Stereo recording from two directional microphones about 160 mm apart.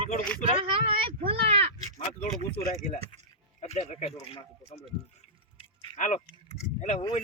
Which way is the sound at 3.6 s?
40° left (ahead or behind).